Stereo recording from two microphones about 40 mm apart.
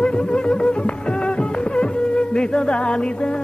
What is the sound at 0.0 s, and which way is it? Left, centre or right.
Music, left.